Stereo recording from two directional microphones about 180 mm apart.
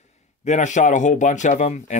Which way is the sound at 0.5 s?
40° left (ahead or behind).